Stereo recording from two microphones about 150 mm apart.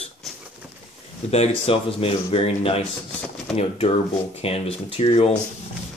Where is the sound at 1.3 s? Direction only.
40° left (ahead or behind).